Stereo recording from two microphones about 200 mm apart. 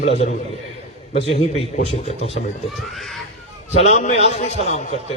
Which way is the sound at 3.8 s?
35° left (ahead or behind).